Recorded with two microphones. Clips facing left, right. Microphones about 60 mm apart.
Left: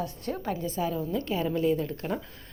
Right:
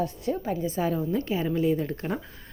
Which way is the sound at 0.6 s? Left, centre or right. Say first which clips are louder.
Right 3 dB; right.